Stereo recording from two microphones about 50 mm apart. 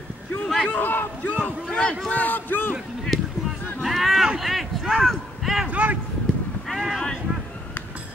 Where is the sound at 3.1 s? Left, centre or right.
Centre.